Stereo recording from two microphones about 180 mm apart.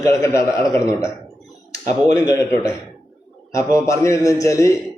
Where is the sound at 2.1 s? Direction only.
15° left (ahead or behind).